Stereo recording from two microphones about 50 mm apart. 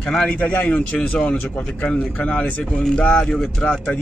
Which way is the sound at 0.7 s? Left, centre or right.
Left.